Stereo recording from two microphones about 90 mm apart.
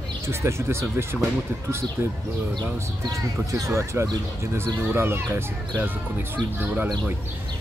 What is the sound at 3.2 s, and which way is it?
Speech, 35° right (ahead or behind).